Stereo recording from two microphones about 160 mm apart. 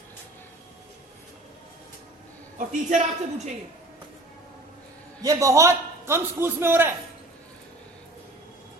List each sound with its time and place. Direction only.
2.6 s a man's voice: 50° right (ahead or behind)
5.2 s a man's voice: 20° right (ahead or behind)